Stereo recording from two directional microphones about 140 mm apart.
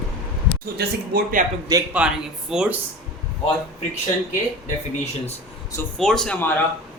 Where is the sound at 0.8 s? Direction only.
90° right.